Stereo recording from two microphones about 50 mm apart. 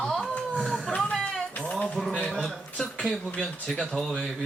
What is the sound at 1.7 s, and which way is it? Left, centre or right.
Speech, centre.